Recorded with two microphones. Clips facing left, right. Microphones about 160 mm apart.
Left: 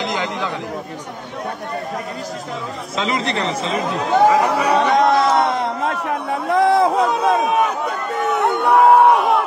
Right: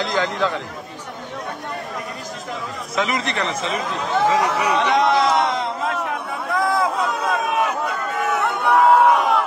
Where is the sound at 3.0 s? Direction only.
30° left (ahead or behind).